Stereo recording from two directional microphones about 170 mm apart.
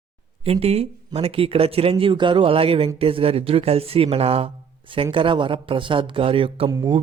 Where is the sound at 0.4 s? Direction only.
35° right (ahead or behind).